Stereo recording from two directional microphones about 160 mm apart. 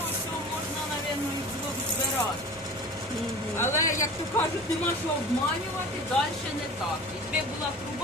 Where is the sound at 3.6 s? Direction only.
15° left (ahead or behind).